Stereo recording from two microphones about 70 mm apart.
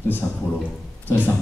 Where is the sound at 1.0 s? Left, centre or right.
Left.